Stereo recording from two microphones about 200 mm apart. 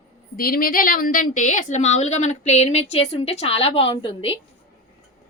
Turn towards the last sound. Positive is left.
turn(degrees=30)  # may be behind; listen again after turning